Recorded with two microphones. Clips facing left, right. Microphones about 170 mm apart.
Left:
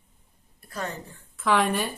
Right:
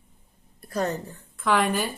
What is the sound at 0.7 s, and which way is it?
Speech, 40° right (ahead or behind).